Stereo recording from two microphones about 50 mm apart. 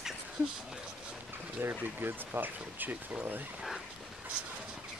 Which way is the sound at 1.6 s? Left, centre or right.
Right.